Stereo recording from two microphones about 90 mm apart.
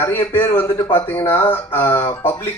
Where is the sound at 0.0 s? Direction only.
25° left (ahead or behind).